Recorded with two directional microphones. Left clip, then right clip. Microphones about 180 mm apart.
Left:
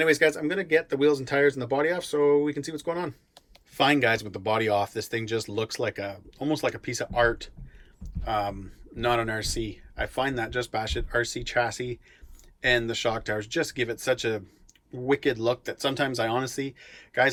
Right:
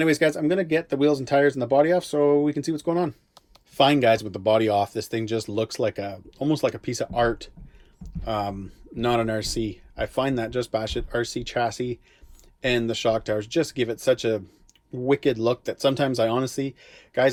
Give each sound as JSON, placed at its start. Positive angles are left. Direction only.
{"t": 0.0, "sound": "speech", "side_deg": -20}